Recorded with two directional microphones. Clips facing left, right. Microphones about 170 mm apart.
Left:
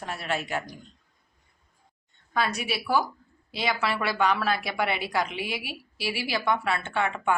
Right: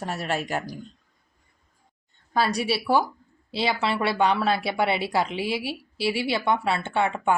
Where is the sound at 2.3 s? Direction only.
35° right (ahead or behind).